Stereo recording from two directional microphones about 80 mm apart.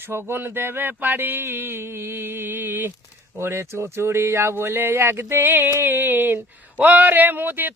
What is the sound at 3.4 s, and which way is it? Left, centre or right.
Speech, right.